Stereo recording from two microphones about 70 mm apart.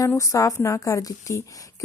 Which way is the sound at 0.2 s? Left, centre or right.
Left.